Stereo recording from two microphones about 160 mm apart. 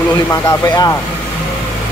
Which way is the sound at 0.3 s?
20° left (ahead or behind).